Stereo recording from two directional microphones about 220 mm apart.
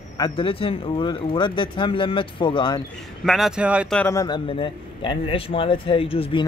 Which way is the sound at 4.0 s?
15° left (ahead or behind).